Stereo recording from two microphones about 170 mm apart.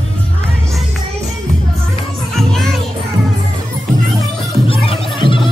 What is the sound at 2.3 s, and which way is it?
Music, centre (ahead or behind).